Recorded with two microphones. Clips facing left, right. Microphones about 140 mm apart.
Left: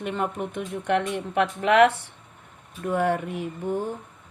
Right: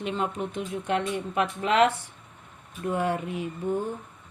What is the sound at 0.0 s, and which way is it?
Speech, 60° left (ahead or behind).